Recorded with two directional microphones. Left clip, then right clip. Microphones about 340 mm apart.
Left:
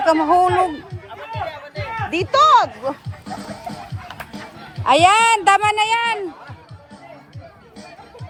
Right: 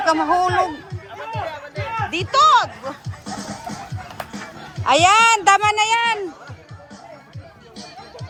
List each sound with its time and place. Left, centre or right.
0.0 s speech: centre
1.4 s music: centre
2.0 s speech: centre
3.7 s music: centre
4.8 s speech: centre